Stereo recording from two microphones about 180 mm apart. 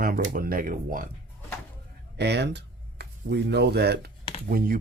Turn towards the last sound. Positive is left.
turn(degrees=-55)  # may be behind; listen again after turning